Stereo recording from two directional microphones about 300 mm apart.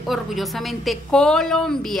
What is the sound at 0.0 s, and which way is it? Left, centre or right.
A woman's voice, centre.